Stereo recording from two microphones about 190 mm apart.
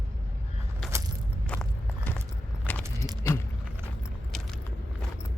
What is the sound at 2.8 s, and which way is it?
Keys jangling, 20° right (ahead or behind).